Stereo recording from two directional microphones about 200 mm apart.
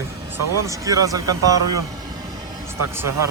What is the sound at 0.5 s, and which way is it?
Speech, 15° right (ahead or behind).